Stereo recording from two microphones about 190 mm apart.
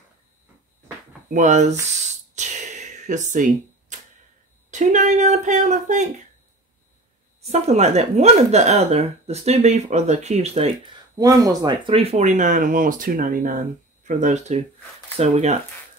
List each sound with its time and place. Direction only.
1.3 s speech: 40° right (ahead or behind)
2.3 s a sound: 40° right (ahead or behind)
4.6 s speech: 40° right (ahead or behind)
7.4 s speech: 35° right (ahead or behind)
11.1 s speech: 20° right (ahead or behind); by 15.6 s 35° right (ahead or behind)